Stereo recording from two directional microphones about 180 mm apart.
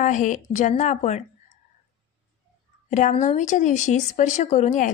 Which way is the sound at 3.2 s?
45° left (ahead or behind).